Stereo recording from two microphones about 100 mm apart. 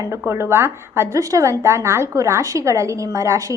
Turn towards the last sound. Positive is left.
turn(degrees=-30)  # may be behind; listen again after turning